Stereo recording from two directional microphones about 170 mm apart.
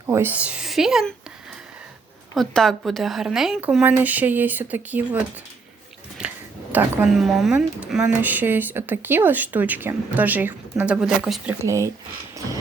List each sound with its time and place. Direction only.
0.1 s speech: 10° right (ahead or behind)
2.3 s speech: centre (ahead or behind)
11.6 s speech: 15° right (ahead or behind)